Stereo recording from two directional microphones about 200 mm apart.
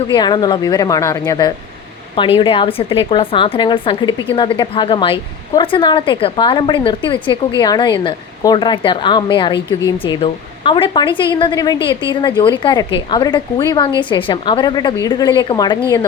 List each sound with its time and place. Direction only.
0.1 s a woman's voice: 20° left (ahead or behind)